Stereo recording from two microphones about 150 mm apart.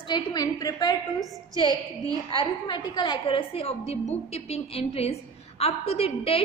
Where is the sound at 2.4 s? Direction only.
30° left (ahead or behind).